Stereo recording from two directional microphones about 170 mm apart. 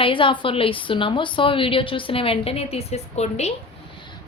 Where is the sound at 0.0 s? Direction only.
30° left (ahead or behind).